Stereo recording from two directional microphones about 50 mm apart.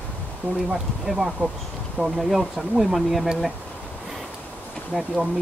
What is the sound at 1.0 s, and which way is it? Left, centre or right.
Speech, centre.